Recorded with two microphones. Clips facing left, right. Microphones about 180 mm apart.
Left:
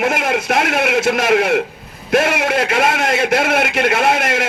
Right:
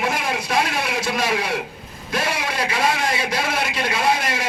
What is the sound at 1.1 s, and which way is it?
Speech, 50° left (ahead or behind).